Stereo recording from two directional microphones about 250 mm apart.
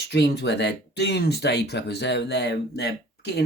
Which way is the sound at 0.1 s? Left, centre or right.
Left.